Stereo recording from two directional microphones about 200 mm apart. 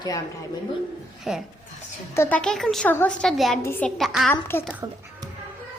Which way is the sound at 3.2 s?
Centre (ahead or behind).